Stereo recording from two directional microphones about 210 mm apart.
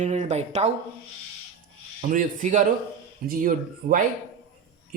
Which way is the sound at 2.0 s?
35° right (ahead or behind).